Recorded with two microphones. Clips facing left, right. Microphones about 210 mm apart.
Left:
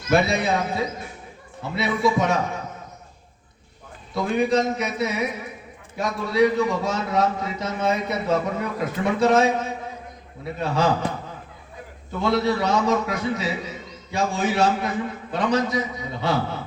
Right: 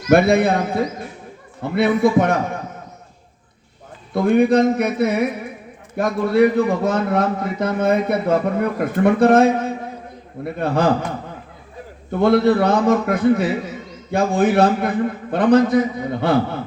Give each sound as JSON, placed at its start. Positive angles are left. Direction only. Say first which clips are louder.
{"t": 0.1, "sound": "a man's voice", "louder": "right 7 dB", "side_deg": -55}
{"t": 4.1, "sound": "a man's voice", "louder": "right 7 dB", "side_deg": -55}
{"t": 12.2, "sound": "a man's voice", "louder": "right 7 dB", "side_deg": -55}